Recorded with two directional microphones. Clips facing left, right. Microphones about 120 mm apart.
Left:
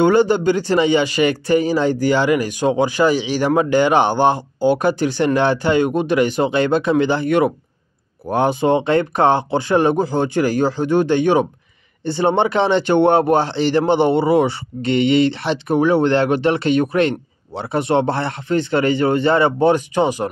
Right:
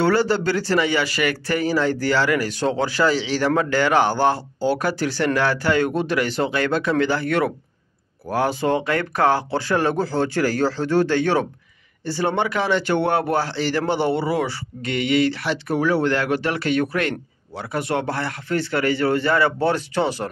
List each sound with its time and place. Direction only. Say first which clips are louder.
0.0 s speech: left 5 dB; 20° left (ahead or behind)